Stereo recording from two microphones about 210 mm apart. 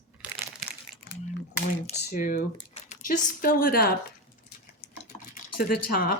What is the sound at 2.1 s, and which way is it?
Speech, 40° left (ahead or behind).